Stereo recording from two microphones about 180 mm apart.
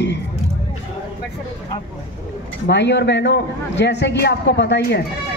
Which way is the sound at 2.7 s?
75° left (ahead or behind).